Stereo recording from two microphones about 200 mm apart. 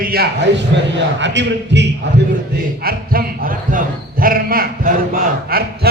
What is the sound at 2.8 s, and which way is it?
A man's voice, 45° right (ahead or behind).